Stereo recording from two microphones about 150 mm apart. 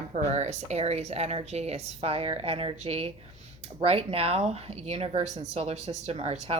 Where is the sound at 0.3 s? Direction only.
50° right (ahead or behind).